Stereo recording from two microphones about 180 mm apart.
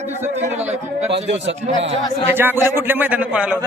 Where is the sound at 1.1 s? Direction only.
85° right.